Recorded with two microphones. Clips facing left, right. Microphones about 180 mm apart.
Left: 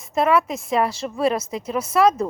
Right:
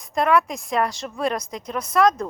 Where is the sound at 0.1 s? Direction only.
5° left (ahead or behind).